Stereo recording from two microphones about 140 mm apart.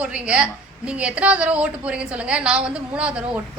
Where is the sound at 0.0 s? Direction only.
10° right (ahead or behind).